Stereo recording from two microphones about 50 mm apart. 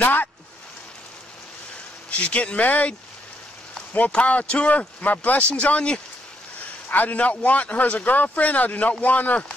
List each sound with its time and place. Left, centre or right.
0.0 s speech: left
2.0 s speech: left
4.1 s speech: left
6.9 s speech: left